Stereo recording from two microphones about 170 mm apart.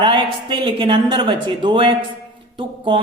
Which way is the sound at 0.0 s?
30° right (ahead or behind).